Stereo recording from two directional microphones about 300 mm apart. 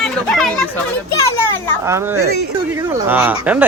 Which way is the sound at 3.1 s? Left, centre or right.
Centre.